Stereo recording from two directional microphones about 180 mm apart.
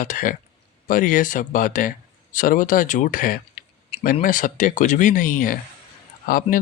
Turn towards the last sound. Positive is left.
turn(degrees=50)  # may be behind; listen again after turning